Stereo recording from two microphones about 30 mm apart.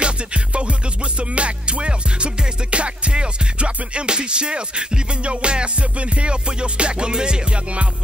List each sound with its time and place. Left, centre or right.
0.0 s music: right